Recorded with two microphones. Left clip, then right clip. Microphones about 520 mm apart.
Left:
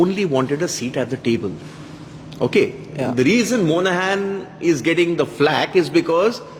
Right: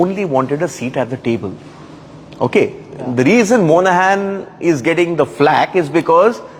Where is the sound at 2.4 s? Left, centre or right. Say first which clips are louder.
Right 3 dB; centre.